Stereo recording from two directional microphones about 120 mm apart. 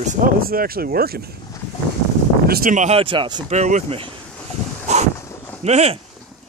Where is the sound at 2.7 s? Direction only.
80° right.